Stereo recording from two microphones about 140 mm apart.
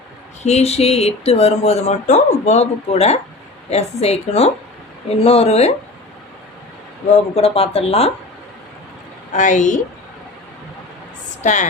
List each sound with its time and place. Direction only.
0.4 s speech: 50° left (ahead or behind)
7.3 s speech: 45° left (ahead or behind)
9.3 s a woman's voice: 60° left (ahead or behind)
11.4 s a woman's voice: 60° left (ahead or behind)